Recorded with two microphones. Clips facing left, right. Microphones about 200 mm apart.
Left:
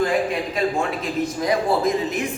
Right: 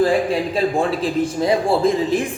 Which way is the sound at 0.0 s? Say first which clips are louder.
Right 4 dB; 30° right (ahead or behind).